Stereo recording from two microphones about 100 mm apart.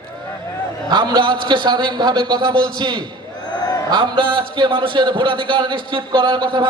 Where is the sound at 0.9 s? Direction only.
50° right (ahead or behind).